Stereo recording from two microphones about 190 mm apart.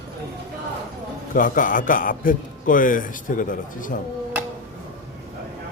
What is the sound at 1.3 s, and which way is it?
A man's voice, 45° left (ahead or behind).